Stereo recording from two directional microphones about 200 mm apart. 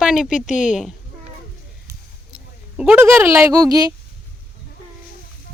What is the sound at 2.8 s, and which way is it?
Speech, 10° right (ahead or behind).